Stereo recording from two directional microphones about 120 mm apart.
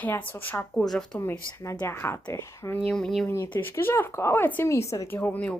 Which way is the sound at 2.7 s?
5° left (ahead or behind).